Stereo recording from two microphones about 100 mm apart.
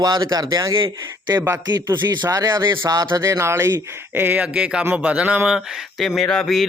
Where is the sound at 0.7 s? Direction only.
50° right (ahead or behind).